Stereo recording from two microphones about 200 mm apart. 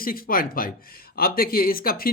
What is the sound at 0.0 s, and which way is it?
Speech, 45° left (ahead or behind).